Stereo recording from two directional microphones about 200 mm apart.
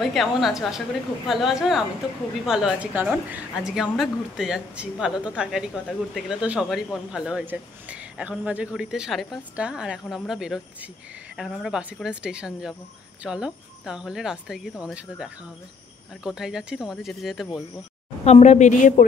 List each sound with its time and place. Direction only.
0.0 s a woman's voice: centre (ahead or behind)
18.2 s a woman's voice: 35° left (ahead or behind)